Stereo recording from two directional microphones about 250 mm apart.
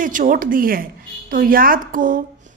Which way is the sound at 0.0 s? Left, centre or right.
Right.